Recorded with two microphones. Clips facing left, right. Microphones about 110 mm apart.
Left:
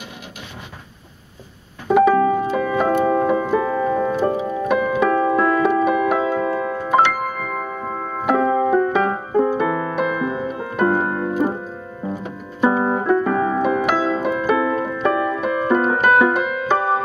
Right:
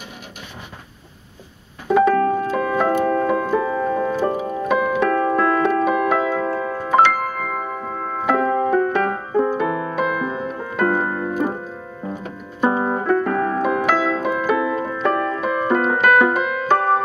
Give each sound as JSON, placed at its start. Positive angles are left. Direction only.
{"t": 1.9, "sound": "music", "side_deg": 5}
{"t": 9.7, "sound": "music", "side_deg": 0}
{"t": 12.0, "sound": "piano", "side_deg": 10}
{"t": 14.5, "sound": "music", "side_deg": 0}